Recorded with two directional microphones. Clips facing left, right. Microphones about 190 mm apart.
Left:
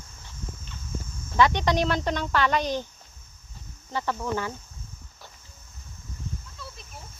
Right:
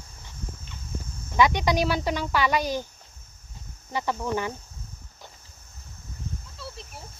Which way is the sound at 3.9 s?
15° right (ahead or behind).